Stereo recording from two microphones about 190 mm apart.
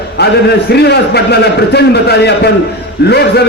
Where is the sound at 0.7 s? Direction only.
60° left (ahead or behind).